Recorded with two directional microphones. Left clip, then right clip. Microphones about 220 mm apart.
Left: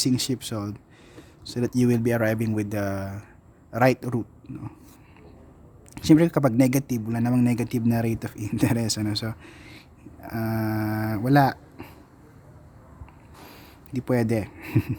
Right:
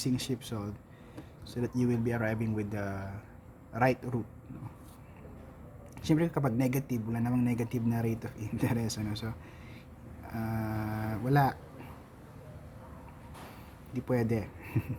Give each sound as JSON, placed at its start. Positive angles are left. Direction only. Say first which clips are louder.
{"t": 0.0, "sound": "speech", "louder": "left 9 dB", "side_deg": 45}
{"t": 5.9, "sound": "speech", "louder": "left 11 dB", "side_deg": 45}
{"t": 13.9, "sound": "speech", "louder": "left 7 dB", "side_deg": 45}